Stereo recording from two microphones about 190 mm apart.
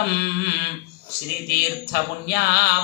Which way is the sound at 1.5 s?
55° left (ahead or behind).